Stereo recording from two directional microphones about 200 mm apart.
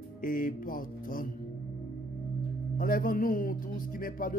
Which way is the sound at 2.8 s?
45° left (ahead or behind).